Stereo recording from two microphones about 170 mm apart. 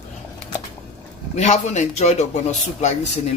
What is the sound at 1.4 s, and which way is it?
Speech, 45° left (ahead or behind).